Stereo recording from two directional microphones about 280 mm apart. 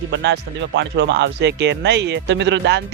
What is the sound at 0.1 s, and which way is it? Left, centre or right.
Speech, right.